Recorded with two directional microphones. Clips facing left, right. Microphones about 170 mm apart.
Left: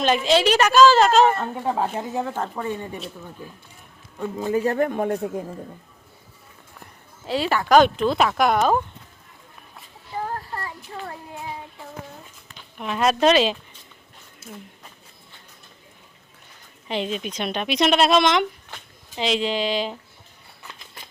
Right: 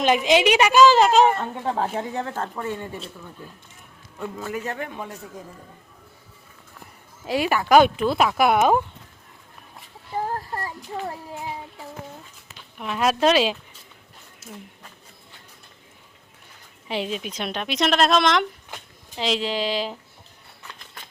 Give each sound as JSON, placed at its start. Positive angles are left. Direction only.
{"t": 0.0, "sound": "speech", "side_deg": -15}
{"t": 1.4, "sound": "a woman's voice", "side_deg": 10}
{"t": 2.3, "sound": "speech", "side_deg": 15}
{"t": 4.5, "sound": "speech", "side_deg": 35}
{"t": 4.9, "sound": "speech", "side_deg": 55}
{"t": 7.3, "sound": "speech", "side_deg": -10}
{"t": 10.2, "sound": "children playing", "side_deg": -40}
{"t": 12.8, "sound": "a woman's voice", "side_deg": 0}
{"t": 16.9, "sound": "a woman's voice", "side_deg": -5}